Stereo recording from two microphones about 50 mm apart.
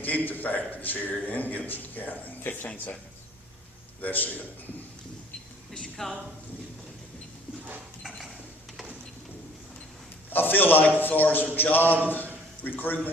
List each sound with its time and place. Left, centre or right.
0.0 s a man's voice: left
4.0 s a man's voice: left
10.2 s a man's voice: left